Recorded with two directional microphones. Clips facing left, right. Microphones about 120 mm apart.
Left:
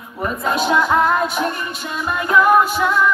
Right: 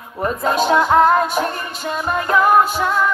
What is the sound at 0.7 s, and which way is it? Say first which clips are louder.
Music: right 3 dB; 35° right (ahead or behind).